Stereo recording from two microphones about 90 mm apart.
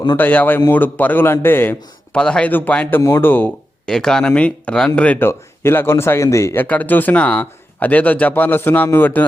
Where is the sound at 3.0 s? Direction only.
30° left (ahead or behind).